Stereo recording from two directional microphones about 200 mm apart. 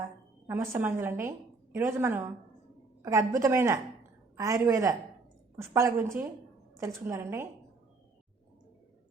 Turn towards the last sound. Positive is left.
turn(degrees=-10)  # may be behind; listen again after turning